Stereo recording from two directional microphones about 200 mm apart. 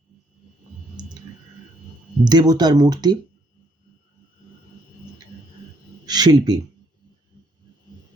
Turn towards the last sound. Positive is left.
turn(degrees=-20)  # may be behind; listen again after turning